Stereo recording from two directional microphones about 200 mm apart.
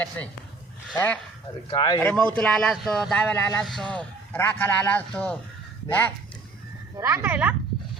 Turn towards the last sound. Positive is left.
turn(degrees=-10)  # may be behind; listen again after turning